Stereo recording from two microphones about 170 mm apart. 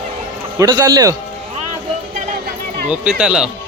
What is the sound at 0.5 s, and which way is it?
Speech, 20° right (ahead or behind).